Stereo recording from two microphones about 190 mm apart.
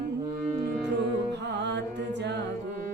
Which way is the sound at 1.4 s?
65° right (ahead or behind).